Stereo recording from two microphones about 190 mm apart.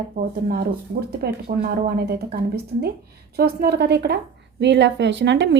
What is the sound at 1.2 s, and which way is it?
Speech, 55° right (ahead or behind).